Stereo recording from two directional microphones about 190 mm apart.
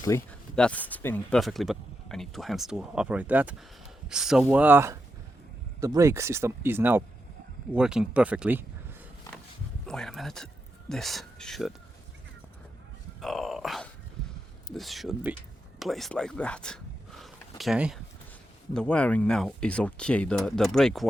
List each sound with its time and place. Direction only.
0.1 s speech: 15° left (ahead or behind); by 8.6 s 10° right (ahead or behind)
9.8 s speech: 5° left (ahead or behind)
13.2 s speech: centre (ahead or behind)